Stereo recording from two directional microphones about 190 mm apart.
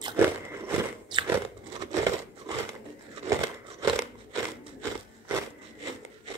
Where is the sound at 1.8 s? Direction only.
20° right (ahead or behind).